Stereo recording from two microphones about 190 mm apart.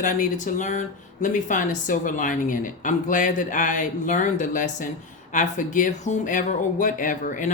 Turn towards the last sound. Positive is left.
turn(degrees=45)  # may be behind; listen again after turning